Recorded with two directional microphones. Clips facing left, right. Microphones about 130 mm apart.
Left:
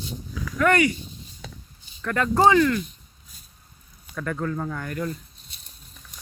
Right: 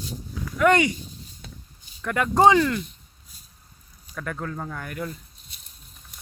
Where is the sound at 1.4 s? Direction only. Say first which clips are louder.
Left 5 dB; 90° left.